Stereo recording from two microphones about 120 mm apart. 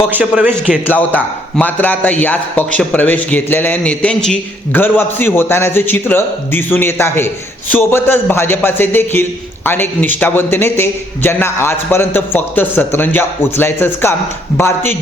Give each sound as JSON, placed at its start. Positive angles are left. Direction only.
{"t": 0.1, "sound": "a man's voice", "side_deg": -15}
{"t": 0.9, "sound": "a man's voice", "side_deg": 15}